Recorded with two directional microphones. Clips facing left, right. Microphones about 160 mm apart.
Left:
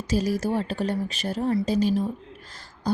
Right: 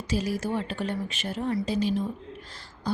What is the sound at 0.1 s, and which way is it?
Speech, 40° left (ahead or behind).